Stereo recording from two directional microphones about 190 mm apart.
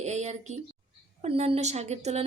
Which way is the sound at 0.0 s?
35° right (ahead or behind).